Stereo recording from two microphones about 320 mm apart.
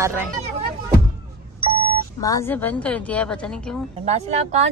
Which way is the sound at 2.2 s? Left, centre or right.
Centre.